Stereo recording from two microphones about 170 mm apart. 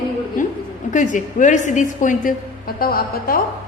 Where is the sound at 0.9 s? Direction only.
50° left (ahead or behind).